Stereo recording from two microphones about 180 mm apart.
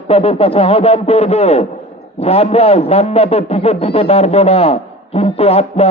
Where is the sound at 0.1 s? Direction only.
35° left (ahead or behind).